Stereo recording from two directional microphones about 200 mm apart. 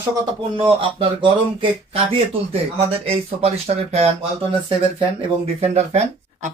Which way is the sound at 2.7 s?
30° right (ahead or behind).